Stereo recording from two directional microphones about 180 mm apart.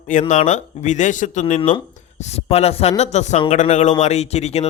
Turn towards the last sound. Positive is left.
turn(degrees=35)  # may be behind; listen again after turning